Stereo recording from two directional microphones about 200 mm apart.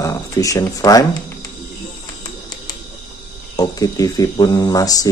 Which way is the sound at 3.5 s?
15° left (ahead or behind).